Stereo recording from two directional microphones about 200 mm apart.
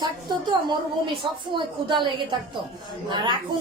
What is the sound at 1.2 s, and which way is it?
A woman's voice, 25° right (ahead or behind).